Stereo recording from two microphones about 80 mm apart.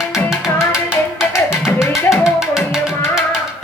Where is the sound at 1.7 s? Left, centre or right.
Centre.